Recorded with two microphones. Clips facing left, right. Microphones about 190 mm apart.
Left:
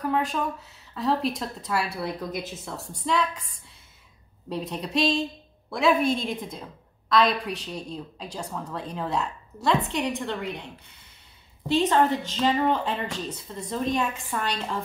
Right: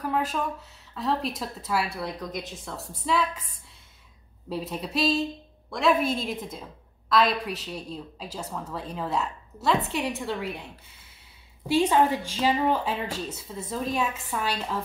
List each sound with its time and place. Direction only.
0.0 s a woman's voice: 5° right (ahead or behind)
4.5 s a woman's voice: 5° right (ahead or behind)